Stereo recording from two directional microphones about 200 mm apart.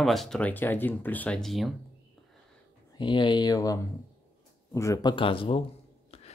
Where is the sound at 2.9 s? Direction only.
20° left (ahead or behind).